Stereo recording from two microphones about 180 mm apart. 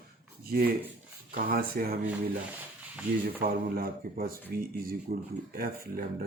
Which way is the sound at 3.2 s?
55° right (ahead or behind).